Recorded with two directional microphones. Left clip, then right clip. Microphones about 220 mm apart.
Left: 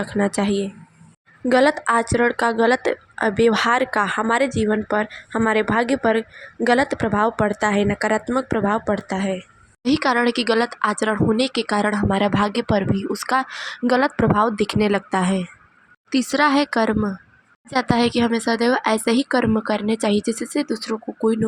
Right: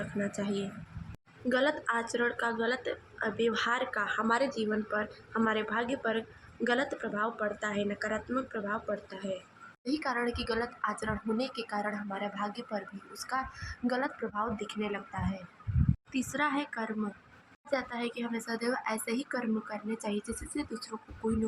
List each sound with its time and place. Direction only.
0.2 s speech: 35° left (ahead or behind)